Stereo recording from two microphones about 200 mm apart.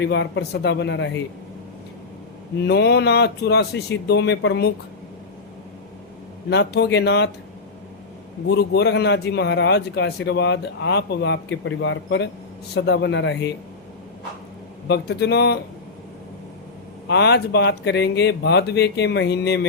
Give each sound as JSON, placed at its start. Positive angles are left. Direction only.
{"t": 0.0, "sound": "a man's voice", "side_deg": 60}
{"t": 2.6, "sound": "a man's voice", "side_deg": 55}
{"t": 6.5, "sound": "a man's voice", "side_deg": 55}
{"t": 8.4, "sound": "a man's voice", "side_deg": 55}
{"t": 14.8, "sound": "a man's voice", "side_deg": 55}
{"t": 17.1, "sound": "a man's voice", "side_deg": 55}